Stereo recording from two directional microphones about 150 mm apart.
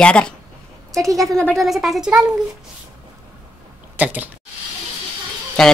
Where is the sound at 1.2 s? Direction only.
5° left (ahead or behind).